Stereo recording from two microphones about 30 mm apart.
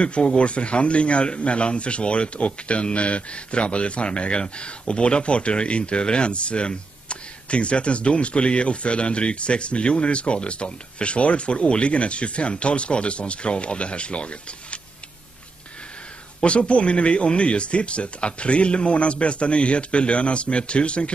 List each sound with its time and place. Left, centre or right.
0.0 s speech: left
16.4 s speech: left